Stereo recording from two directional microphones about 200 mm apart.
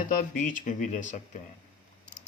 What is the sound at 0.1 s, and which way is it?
Speech, 40° left (ahead or behind).